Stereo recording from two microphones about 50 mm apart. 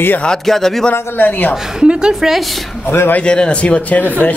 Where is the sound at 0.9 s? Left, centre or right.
Left.